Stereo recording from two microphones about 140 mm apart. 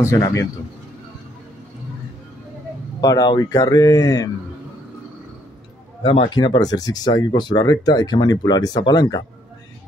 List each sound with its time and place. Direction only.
0.0 s a man's voice: 20° left (ahead or behind)
3.0 s a man's voice: 25° left (ahead or behind)
6.0 s speech: 40° left (ahead or behind)